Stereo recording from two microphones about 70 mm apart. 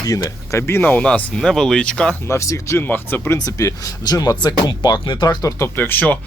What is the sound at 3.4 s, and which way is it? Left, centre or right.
Speech, left.